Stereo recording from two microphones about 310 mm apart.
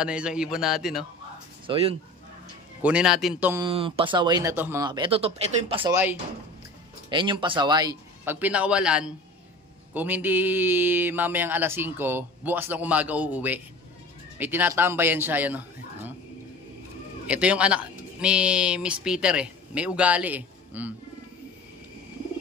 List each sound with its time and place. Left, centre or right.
0.0 s a sound: centre
1.7 s speech: centre
2.8 s speech: centre
7.1 s speech: centre
9.9 s a sound: centre
14.4 s speech: centre
17.3 s speech: centre